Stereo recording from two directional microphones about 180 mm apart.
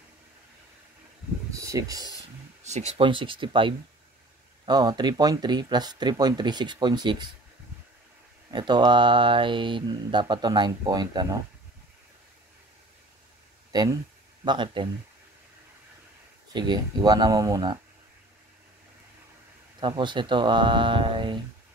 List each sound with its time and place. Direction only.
1.5 s speech: 15° right (ahead or behind)
2.6 s speech: 35° right (ahead or behind)
8.5 s speech: 25° right (ahead or behind)
13.7 s speech: 20° right (ahead or behind)
16.5 s speech: 25° right (ahead or behind)
19.8 s speech: 25° right (ahead or behind)